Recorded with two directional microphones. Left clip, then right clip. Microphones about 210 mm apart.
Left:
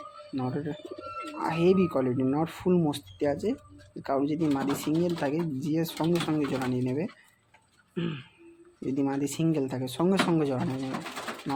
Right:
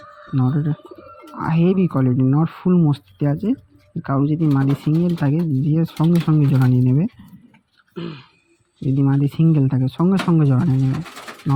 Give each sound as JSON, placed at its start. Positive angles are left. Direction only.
{"t": 0.3, "sound": "speech", "side_deg": -5}
{"t": 7.9, "sound": "music", "side_deg": -25}
{"t": 9.0, "sound": "speech", "side_deg": -10}